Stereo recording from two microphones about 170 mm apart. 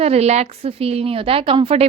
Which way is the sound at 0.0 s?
40° right (ahead or behind).